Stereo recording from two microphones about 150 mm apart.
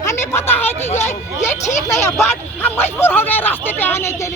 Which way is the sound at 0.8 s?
50° left (ahead or behind).